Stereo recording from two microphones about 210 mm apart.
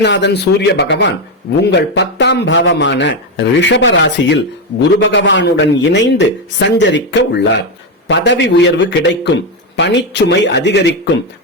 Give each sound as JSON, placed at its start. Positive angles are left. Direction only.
{"t": 0.0, "sound": "speech", "side_deg": 55}